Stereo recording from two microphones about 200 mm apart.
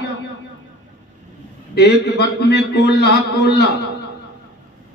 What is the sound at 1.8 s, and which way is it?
A man's voice, 55° left (ahead or behind).